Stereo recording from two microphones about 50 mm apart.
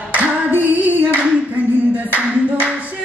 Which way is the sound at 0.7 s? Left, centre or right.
Right.